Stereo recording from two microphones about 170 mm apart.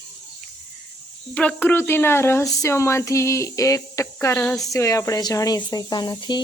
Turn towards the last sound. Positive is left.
turn(degrees=25)  # may be behind; listen again after turning